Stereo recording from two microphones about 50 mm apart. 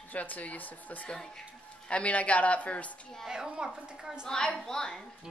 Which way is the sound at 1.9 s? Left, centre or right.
Left.